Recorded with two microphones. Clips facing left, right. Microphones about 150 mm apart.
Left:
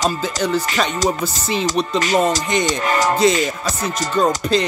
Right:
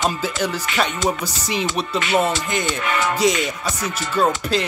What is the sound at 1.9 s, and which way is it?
Speech, 40° left (ahead or behind).